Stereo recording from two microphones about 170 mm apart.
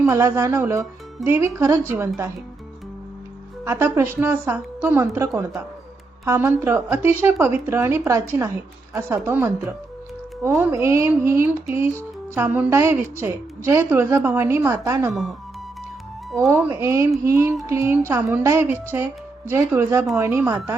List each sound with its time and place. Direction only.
0.0 s a woman's voice: 15° right (ahead or behind)
3.6 s a woman's voice: 15° right (ahead or behind)
15.1 s speech: centre (ahead or behind)
16.5 s a woman's voice: 15° right (ahead or behind)